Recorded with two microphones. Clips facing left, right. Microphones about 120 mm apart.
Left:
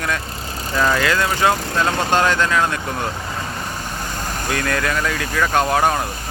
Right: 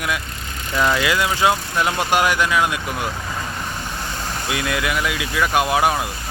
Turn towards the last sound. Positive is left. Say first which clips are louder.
# left 1 dB
turn(degrees=-10)  # may be behind; listen again after turning